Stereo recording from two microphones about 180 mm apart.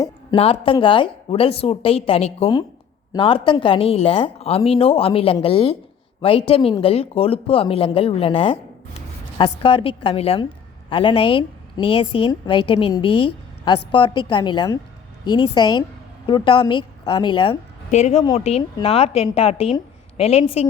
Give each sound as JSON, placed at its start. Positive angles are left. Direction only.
{"t": 0.0, "sound": "a woman's voice", "side_deg": 25}